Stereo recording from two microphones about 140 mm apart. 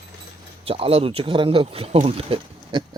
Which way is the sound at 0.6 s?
40° right (ahead or behind).